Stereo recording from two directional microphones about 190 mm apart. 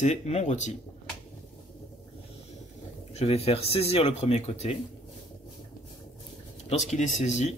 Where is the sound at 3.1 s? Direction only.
35° left (ahead or behind).